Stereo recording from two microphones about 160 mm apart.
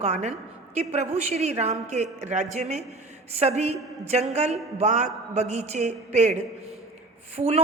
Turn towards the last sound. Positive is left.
turn(degrees=-45)  # may be behind; listen again after turning